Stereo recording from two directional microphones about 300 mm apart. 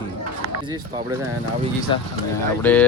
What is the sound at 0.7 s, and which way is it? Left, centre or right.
Speech, centre.